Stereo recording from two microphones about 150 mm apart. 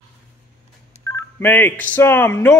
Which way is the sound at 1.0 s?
15° left (ahead or behind).